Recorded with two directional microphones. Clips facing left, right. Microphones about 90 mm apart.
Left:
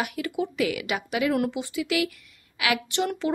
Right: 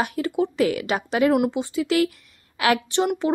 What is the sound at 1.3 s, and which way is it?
Speech, 20° right (ahead or behind).